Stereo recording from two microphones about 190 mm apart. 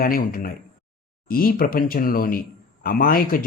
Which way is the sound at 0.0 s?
50° left (ahead or behind).